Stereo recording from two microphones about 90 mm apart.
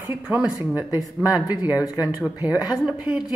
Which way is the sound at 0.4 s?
10° right (ahead or behind).